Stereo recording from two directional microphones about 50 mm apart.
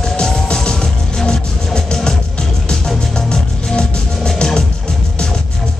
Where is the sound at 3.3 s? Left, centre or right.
Centre.